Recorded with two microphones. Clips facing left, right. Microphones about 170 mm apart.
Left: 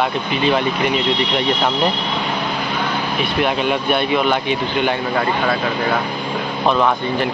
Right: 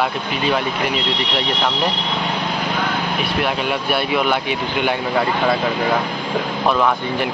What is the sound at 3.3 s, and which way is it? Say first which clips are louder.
Speech: left 4 dB; 5° right (ahead or behind).